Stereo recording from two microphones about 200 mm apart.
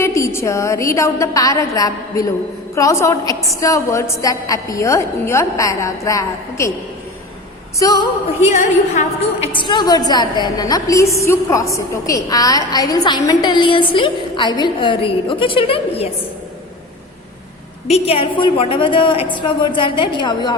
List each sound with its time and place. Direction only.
0.0 s a woman's voice: 15° left (ahead or behind)
7.8 s a woman's voice: 20° left (ahead or behind)
8.5 s a woman's voice: 40° left (ahead or behind)
9.5 s a woman's voice: 25° left (ahead or behind)
17.9 s a woman's voice: 30° left (ahead or behind)